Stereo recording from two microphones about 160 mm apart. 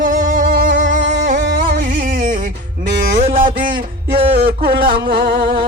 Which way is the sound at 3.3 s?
60° right (ahead or behind).